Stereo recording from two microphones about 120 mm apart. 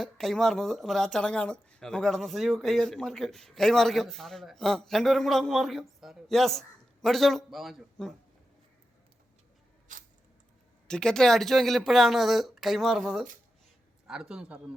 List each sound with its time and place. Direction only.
0.0 s a man's voice: 5° left (ahead or behind)
9.9 s coin: 90° right
10.8 s a man's voice: 5° left (ahead or behind); by 14.8 s 10° right (ahead or behind)